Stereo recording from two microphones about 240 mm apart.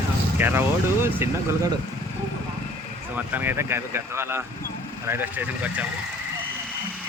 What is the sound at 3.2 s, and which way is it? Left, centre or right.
Speech, centre.